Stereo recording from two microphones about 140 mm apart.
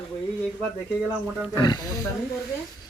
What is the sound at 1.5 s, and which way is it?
Speech, 30° left (ahead or behind).